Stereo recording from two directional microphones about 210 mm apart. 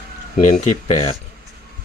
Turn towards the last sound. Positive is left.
turn(degrees=35)  # may be behind; listen again after turning